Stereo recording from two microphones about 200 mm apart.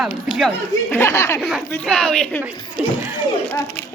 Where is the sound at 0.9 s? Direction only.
15° left (ahead or behind).